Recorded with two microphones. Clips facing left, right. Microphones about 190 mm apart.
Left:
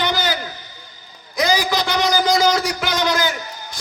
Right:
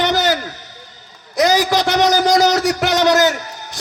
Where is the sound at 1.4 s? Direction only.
75° right (ahead or behind).